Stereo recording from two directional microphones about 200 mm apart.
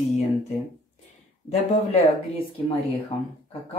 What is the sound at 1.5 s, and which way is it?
Speech, 30° left (ahead or behind).